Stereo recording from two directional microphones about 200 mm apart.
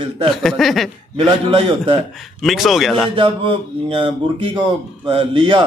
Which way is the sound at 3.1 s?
25° right (ahead or behind).